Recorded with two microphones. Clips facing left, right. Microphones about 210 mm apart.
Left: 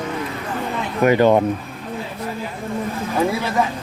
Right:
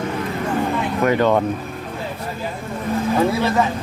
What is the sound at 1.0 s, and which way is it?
Speech, 15° left (ahead or behind).